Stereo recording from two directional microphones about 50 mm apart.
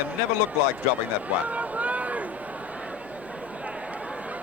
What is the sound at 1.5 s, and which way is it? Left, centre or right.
Boat, right.